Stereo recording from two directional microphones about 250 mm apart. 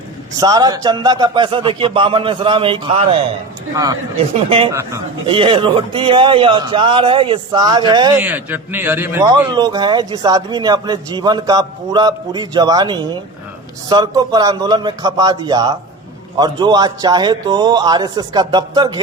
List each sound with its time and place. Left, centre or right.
0.3 s a man's voice: centre
4.7 s a man's voice: centre